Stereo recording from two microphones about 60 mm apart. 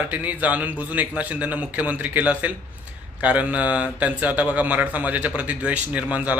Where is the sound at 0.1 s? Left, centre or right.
Right.